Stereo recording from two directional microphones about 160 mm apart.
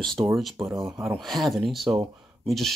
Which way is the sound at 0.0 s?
Centre (ahead or behind).